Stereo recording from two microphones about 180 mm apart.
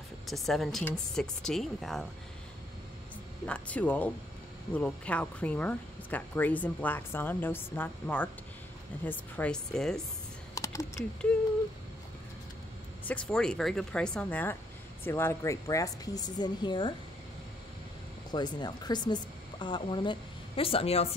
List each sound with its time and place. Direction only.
0.3 s speech: centre (ahead or behind)
3.4 s speech: 5° left (ahead or behind)
10.5 s computer keyboard: 15° left (ahead or behind)
13.0 s speech: 5° left (ahead or behind); by 16.9 s 25° left (ahead or behind)
18.3 s speech: 25° left (ahead or behind)